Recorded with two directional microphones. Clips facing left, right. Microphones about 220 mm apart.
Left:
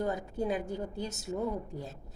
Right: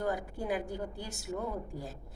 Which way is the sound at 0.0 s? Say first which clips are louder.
Left 2 dB; 20° left (ahead or behind).